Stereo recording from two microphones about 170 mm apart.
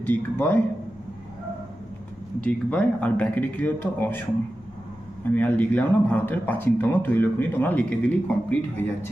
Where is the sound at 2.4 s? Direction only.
5° left (ahead or behind).